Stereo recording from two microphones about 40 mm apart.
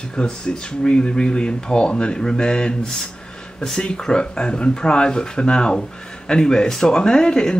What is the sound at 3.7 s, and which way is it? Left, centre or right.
Speech, left.